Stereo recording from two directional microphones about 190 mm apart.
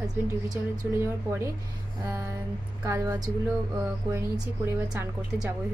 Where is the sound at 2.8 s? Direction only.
15° right (ahead or behind).